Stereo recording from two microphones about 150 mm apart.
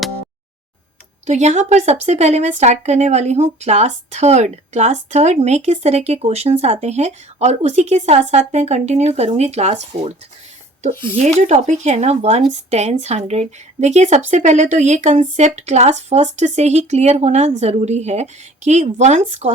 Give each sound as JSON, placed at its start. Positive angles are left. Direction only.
{"t": 1.3, "sound": "speech", "side_deg": -50}
{"t": 11.3, "sound": "speech", "side_deg": -50}